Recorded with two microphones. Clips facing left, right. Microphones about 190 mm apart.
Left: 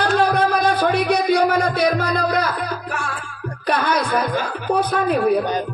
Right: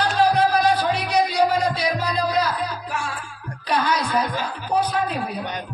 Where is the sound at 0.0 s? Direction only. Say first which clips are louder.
Left 1 dB; 55° left (ahead or behind).